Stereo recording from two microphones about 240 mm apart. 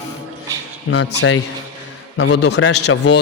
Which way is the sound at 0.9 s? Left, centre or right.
Left.